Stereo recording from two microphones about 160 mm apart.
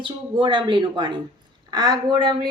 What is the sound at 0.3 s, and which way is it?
A woman's voice, 30° right (ahead or behind).